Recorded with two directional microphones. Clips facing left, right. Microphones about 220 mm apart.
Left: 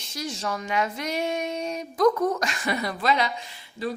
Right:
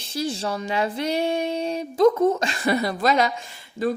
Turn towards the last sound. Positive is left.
turn(degrees=-50)  # may be behind; listen again after turning